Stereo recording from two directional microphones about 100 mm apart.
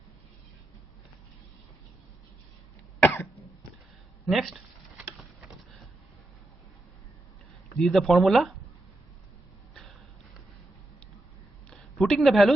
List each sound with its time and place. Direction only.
3.0 s cough: 20° left (ahead or behind)
4.3 s speech: centre (ahead or behind)
5.1 s vehicle: centre (ahead or behind)
7.8 s speech: centre (ahead or behind)
11.7 s a sound: centre (ahead or behind)